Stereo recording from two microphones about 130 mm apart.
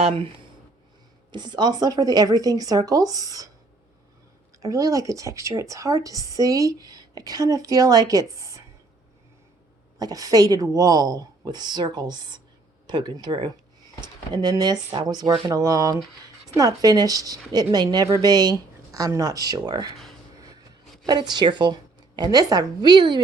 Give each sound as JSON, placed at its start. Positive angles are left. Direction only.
{"t": 0.0, "sound": "speech", "side_deg": -45}
{"t": 1.3, "sound": "speech", "side_deg": -35}
{"t": 4.6, "sound": "speech", "side_deg": -25}
{"t": 10.0, "sound": "a woman's voice", "side_deg": -30}
{"t": 21.1, "sound": "a woman's voice", "side_deg": -35}